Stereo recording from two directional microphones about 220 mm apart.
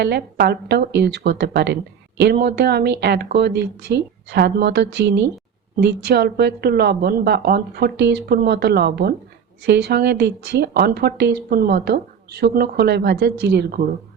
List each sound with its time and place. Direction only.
0.0 s a woman's voice: 45° right (ahead or behind)